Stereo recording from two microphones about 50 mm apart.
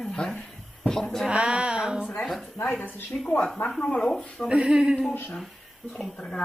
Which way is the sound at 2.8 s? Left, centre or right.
Left.